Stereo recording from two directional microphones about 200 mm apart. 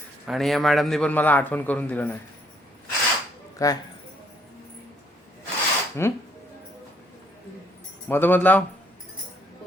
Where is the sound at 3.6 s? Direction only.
15° left (ahead or behind).